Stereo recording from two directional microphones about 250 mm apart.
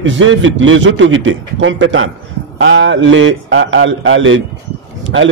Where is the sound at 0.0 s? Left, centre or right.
Right.